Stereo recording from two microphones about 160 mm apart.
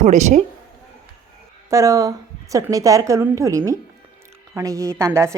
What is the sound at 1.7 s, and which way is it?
A woman's voice, 20° right (ahead or behind).